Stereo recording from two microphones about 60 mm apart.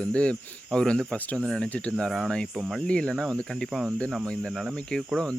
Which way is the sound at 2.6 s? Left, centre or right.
Centre.